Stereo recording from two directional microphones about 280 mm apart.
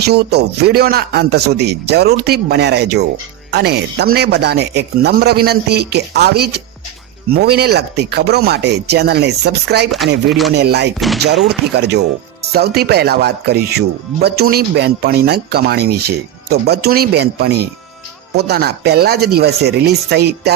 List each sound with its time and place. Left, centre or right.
0.0 s speech: right